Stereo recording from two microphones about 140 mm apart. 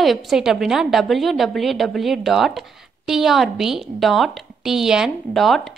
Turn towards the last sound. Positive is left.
turn(degrees=0)  # may be behind; listen again after turning